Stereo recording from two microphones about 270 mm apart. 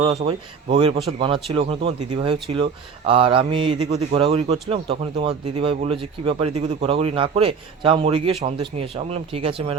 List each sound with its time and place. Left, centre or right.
0.0 s a man's voice: right